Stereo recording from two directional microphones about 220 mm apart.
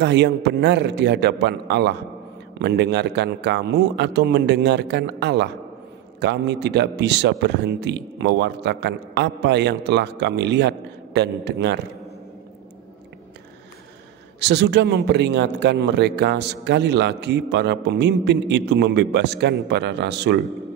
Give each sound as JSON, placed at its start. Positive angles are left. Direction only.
{"t": 0.0, "sound": "a man's voice", "side_deg": -50}
{"t": 14.4, "sound": "a man's voice", "side_deg": -50}